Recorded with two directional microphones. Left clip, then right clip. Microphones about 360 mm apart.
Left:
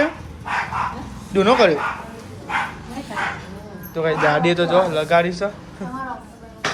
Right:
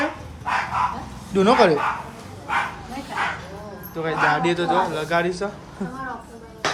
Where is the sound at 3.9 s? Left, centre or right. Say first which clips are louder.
Left 3 dB; centre.